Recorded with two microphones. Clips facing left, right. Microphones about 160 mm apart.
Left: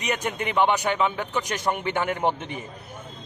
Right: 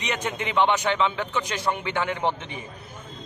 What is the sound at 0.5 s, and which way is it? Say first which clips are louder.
Speech: even; 10° left (ahead or behind).